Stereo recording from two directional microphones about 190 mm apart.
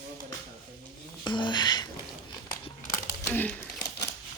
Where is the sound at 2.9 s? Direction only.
10° left (ahead or behind).